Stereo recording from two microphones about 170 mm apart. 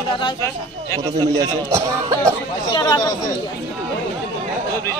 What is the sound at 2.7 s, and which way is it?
Speech, 20° left (ahead or behind).